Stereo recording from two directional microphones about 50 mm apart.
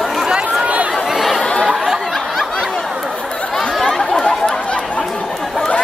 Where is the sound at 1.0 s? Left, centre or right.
Centre.